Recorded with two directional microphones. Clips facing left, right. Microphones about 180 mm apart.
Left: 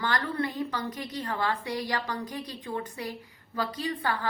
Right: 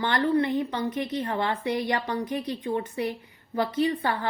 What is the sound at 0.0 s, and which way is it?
A woman's voice, 20° right (ahead or behind).